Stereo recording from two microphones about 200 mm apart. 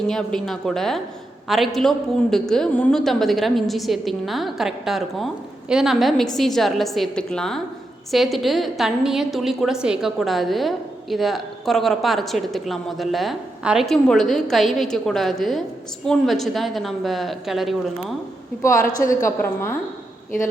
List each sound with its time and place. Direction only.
0.1 s a woman's voice: centre (ahead or behind)
18.6 s a woman's voice: 15° left (ahead or behind)